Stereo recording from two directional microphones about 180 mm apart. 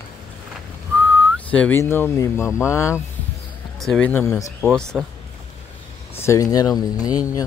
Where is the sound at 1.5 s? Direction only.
10° left (ahead or behind).